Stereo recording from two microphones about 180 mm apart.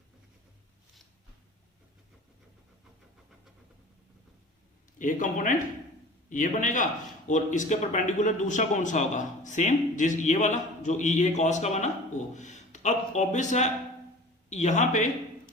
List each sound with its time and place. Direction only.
4.9 s a man's voice: 45° left (ahead or behind)